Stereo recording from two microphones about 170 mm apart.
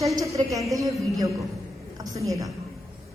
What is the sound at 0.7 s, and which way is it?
Child singing, 20° right (ahead or behind).